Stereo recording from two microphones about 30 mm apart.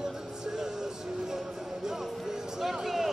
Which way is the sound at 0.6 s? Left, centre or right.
Centre.